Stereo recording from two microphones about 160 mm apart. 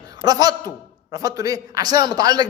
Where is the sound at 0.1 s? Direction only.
25° right (ahead or behind).